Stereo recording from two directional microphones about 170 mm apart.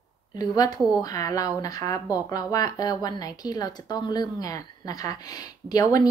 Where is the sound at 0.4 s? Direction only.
25° left (ahead or behind).